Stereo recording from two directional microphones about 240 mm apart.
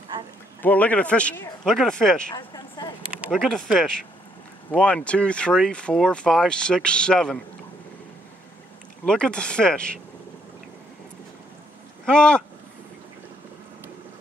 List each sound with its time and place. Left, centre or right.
0.6 s speech: centre
2.3 s a sound: centre
3.1 s speech: centre
9.0 s speech: centre
12.1 s speech: centre